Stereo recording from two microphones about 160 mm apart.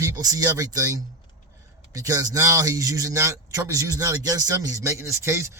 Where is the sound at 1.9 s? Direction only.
20° right (ahead or behind).